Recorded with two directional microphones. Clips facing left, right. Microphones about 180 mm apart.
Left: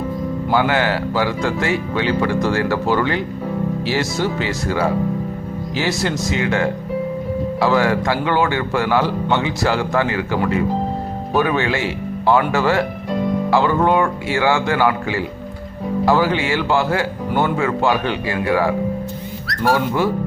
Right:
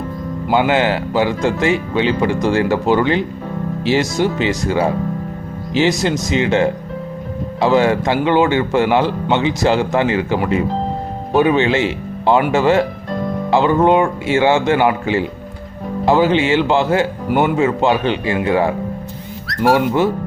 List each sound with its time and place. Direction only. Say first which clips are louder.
0.5 s speech: right 3 dB; 20° right (ahead or behind)